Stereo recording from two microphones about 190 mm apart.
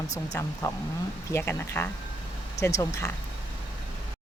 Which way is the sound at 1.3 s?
15° left (ahead or behind).